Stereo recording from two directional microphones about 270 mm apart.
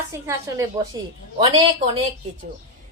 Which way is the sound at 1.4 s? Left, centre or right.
Centre.